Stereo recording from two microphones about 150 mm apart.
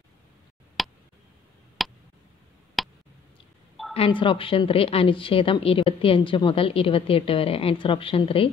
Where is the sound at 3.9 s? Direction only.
35° left (ahead or behind).